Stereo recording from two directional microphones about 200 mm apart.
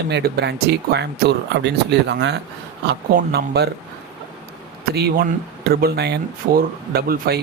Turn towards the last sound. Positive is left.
turn(degrees=-50)  # may be behind; listen again after turning